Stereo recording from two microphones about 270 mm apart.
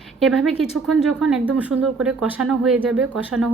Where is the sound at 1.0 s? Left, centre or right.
Centre.